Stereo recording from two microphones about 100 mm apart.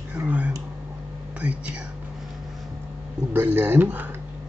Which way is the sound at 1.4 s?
10° right (ahead or behind).